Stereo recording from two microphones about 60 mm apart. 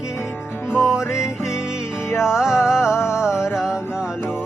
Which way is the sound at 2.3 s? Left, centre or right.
Centre.